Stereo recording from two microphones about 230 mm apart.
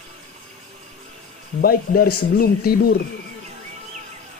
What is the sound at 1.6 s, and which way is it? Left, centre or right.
A man's voice, left.